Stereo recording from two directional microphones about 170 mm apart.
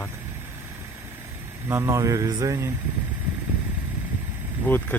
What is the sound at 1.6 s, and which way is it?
Speech, 15° right (ahead or behind).